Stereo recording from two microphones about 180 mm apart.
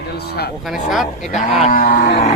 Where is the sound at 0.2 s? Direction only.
60° left (ahead or behind).